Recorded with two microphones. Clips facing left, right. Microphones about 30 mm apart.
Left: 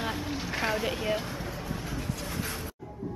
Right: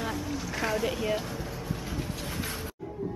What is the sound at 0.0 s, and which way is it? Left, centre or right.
Vehicle, left.